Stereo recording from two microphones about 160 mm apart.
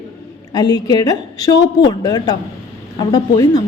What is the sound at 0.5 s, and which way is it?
A woman's voice, 25° left (ahead or behind).